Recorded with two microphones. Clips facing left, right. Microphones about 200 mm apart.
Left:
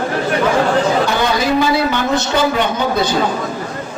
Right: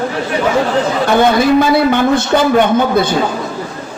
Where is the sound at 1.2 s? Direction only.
55° right (ahead or behind).